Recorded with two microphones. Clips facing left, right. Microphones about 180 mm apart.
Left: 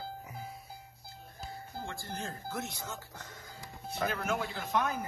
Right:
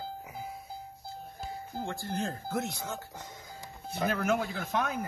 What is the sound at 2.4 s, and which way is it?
Speech, 55° right (ahead or behind).